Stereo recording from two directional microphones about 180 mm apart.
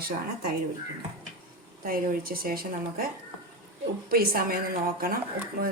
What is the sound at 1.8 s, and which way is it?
Speech, 55° right (ahead or behind).